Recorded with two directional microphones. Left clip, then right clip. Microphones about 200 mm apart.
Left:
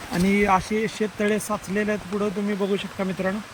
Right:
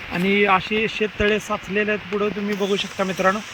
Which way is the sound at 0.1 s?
15° left (ahead or behind).